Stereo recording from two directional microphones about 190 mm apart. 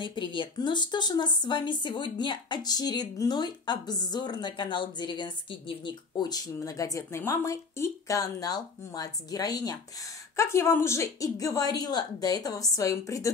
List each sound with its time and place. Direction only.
0.0 s speech: 25° left (ahead or behind)